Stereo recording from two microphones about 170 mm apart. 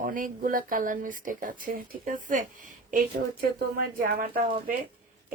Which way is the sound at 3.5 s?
60° right (ahead or behind).